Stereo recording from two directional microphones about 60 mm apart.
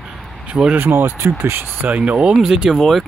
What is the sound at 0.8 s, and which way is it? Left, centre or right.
Speech, right.